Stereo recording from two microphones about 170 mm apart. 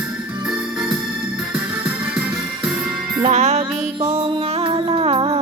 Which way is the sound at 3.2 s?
40° right (ahead or behind).